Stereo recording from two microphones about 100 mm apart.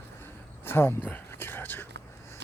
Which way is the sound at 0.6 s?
20° left (ahead or behind).